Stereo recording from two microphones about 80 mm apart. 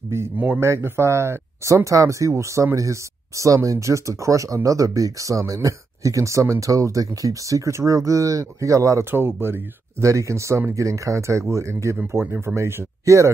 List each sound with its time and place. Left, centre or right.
0.6 s speech: right
9.1 s speech: right